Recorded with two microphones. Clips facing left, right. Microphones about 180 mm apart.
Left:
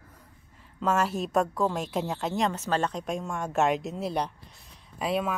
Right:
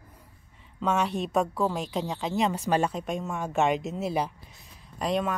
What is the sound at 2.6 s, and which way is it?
Speech, 10° right (ahead or behind).